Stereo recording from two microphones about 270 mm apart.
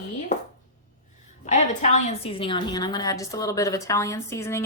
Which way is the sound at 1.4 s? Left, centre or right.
Left.